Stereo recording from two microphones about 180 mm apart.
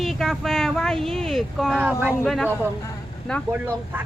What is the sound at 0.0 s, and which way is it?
Speech, centre (ahead or behind).